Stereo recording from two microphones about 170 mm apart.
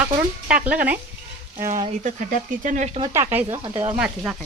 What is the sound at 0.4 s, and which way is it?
Speech, 55° right (ahead or behind).